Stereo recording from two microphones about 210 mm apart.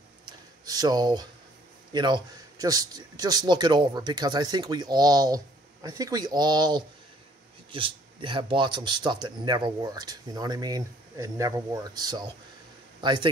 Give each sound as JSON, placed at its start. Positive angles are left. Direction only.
{"t": 0.7, "sound": "a man's voice", "side_deg": -20}